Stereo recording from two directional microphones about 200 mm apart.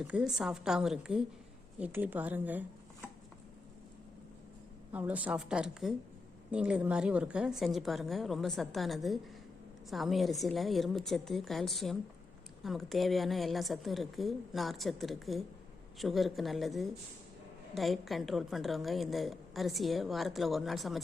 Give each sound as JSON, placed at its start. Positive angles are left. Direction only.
{"t": 0.0, "sound": "a woman's voice", "side_deg": -5}
{"t": 4.9, "sound": "a woman's voice", "side_deg": -10}